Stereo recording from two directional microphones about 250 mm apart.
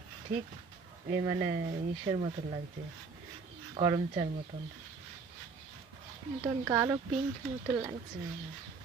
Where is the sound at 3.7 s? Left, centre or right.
Centre.